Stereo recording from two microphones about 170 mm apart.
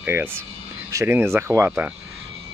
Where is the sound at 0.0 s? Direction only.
10° right (ahead or behind).